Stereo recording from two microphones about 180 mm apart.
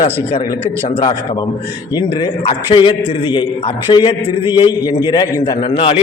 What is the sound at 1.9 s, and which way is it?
A man's voice, 25° left (ahead or behind).